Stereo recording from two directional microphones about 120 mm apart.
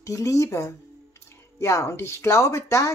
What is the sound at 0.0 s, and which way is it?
Speech, 25° left (ahead or behind).